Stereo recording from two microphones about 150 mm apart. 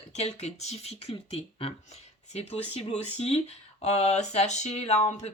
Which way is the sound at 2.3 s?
45° left (ahead or behind).